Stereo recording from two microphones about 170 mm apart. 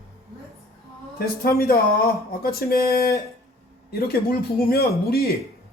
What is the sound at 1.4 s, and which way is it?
Speech, 60° left (ahead or behind).